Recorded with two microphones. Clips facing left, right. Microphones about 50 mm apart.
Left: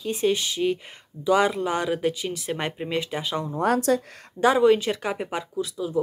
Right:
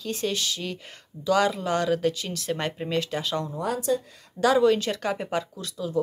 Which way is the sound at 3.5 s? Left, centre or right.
Left.